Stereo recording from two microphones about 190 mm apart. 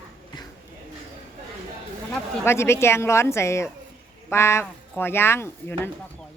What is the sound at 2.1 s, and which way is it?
Speech, 15° left (ahead or behind).